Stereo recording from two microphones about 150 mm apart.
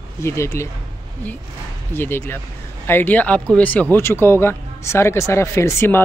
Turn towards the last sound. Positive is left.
turn(degrees=15)  # may be behind; listen again after turning